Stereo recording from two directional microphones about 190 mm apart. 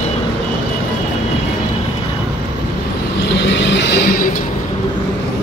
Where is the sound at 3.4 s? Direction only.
65° left (ahead or behind).